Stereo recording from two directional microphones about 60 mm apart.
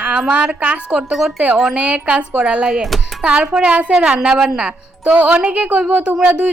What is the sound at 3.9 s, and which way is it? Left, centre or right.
A woman's voice, centre.